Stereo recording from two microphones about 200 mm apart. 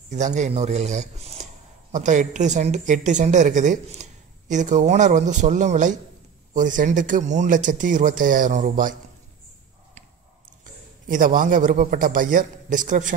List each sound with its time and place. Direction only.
0.1 s speech: 35° right (ahead or behind)
10.6 s a man's voice: 40° right (ahead or behind)